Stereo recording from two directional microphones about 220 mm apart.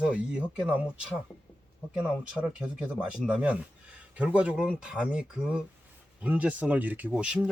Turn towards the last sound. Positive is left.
turn(degrees=-5)  # may be behind; listen again after turning